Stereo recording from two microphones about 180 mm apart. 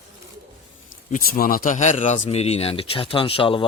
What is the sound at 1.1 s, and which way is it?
Speech, 50° left (ahead or behind).